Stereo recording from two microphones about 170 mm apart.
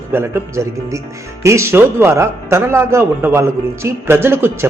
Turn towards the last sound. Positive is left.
turn(degrees=-15)  # may be behind; listen again after turning